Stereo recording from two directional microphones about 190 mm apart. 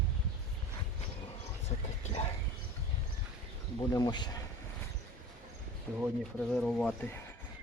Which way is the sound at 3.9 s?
20° left (ahead or behind).